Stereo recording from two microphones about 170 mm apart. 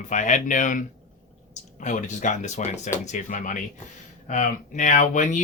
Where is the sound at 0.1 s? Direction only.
45° left (ahead or behind).